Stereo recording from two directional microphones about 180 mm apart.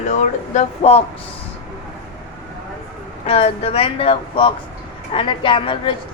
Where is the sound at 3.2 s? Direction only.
35° left (ahead or behind).